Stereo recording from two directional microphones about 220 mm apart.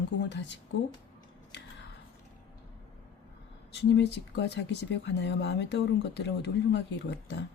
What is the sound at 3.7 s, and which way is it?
Speech, 50° left (ahead or behind).